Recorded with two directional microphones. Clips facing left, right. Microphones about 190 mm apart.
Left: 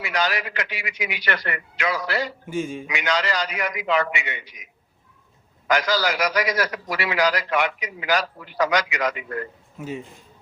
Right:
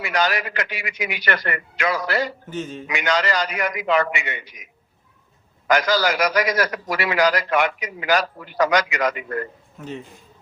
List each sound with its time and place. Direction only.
0.0 s a man's voice: 50° right (ahead or behind)
2.5 s a man's voice: 10° left (ahead or behind)
2.8 s a man's voice: 50° right (ahead or behind)
9.7 s speech: 10° left (ahead or behind)